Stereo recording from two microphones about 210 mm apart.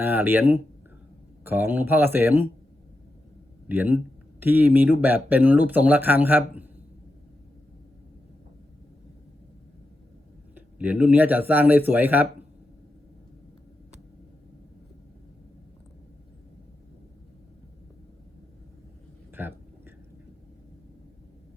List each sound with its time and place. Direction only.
0.0 s speech: 10° right (ahead or behind)
3.7 s speech: 10° right (ahead or behind)
10.5 s speech: 10° right (ahead or behind)
19.3 s a sound: 10° right (ahead or behind)